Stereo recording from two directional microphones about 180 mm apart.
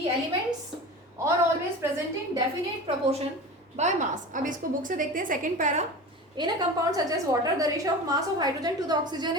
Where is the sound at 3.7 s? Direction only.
40° right (ahead or behind).